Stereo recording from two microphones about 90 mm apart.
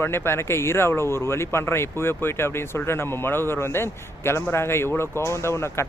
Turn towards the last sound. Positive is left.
turn(degrees=30)  # may be behind; listen again after turning